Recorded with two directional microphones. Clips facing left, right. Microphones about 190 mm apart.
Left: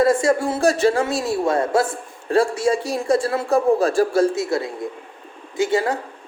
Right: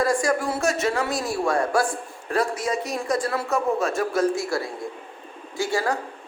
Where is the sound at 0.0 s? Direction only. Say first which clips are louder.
Left 5 dB; 25° left (ahead or behind).